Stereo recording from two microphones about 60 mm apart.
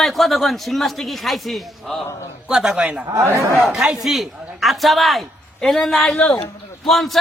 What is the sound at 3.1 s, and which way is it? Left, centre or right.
Speech, right.